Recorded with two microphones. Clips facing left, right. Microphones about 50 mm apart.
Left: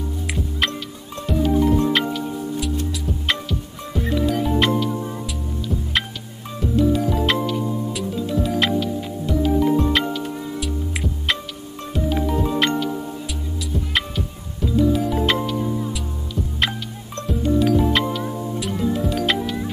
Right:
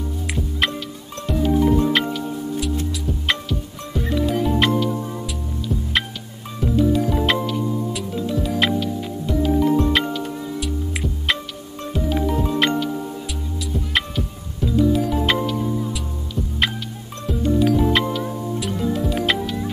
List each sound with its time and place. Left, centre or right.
1.2 s music: centre
6.8 s music: centre
17.3 s music: centre